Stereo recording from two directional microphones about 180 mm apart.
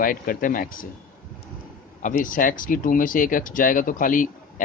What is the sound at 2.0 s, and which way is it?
Speech, 50° left (ahead or behind).